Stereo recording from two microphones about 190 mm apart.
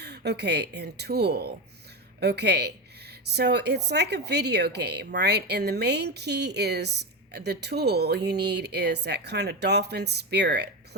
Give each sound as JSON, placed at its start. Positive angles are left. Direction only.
{"t": 0.0, "sound": "a woman's voice", "side_deg": -60}